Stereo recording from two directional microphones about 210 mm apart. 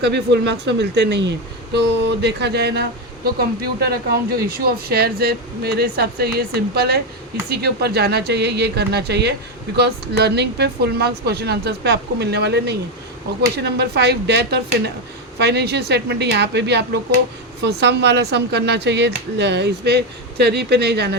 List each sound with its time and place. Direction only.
0.0 s speech: 55° right (ahead or behind)